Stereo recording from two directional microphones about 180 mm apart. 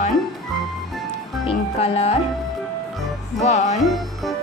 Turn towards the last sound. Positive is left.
turn(degrees=0)  # may be behind; listen again after turning